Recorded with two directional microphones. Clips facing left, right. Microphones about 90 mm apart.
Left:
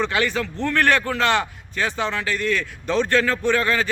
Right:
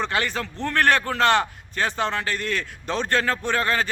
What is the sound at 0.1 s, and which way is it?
A man's voice, 35° right (ahead or behind).